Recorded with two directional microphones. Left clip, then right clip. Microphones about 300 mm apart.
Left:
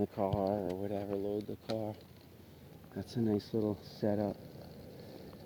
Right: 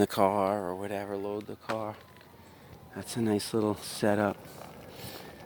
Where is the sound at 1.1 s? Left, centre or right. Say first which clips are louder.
Right 2 dB; centre.